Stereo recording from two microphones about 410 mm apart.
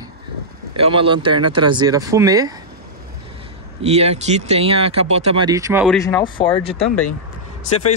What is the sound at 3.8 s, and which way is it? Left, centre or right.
Speech, centre.